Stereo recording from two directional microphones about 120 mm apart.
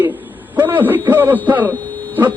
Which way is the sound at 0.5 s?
15° right (ahead or behind).